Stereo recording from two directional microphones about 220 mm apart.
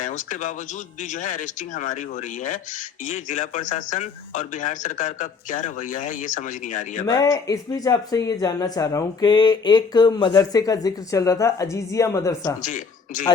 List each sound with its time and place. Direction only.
0.0 s speech: 35° left (ahead or behind)
7.1 s speech: 15° left (ahead or behind)
12.6 s speech: 35° left (ahead or behind)